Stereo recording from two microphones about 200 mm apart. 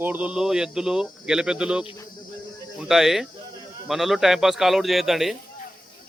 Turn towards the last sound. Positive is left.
turn(degrees=0)  # may be behind; listen again after turning